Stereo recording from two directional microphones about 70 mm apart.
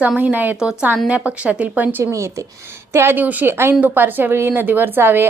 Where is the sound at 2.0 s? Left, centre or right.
Right.